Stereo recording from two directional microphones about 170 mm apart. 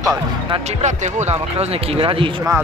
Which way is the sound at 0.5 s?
40° right (ahead or behind).